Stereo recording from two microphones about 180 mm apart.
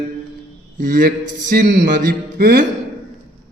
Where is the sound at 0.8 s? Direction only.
50° right (ahead or behind).